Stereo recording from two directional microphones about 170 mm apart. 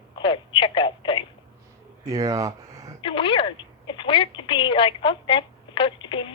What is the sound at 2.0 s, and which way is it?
Speech, 20° right (ahead or behind).